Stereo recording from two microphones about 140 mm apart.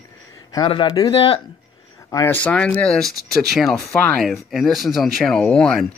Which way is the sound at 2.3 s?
10° left (ahead or behind).